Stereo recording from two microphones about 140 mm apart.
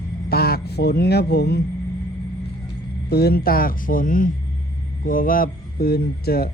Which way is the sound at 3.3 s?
90° left.